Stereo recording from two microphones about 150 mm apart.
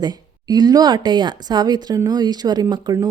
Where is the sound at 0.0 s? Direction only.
25° right (ahead or behind).